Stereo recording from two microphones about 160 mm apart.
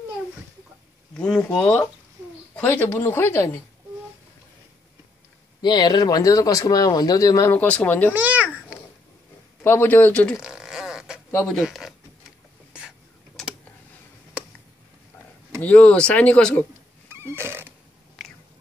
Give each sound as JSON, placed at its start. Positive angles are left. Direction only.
{"t": 1.1, "sound": "speech", "side_deg": 5}
{"t": 5.6, "sound": "speech", "side_deg": 25}
{"t": 8.1, "sound": "babbling", "side_deg": -10}
{"t": 9.6, "sound": "speech", "side_deg": 10}
{"t": 10.4, "sound": "fart", "side_deg": -5}
{"t": 15.6, "sound": "speech", "side_deg": 10}
{"t": 17.1, "sound": "fart", "side_deg": -15}
{"t": 18.2, "sound": "chewing", "side_deg": 0}